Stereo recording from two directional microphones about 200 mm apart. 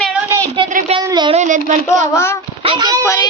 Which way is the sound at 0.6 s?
40° right (ahead or behind).